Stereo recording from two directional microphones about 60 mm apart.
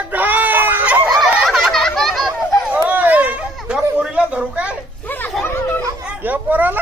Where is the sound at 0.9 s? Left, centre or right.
Right.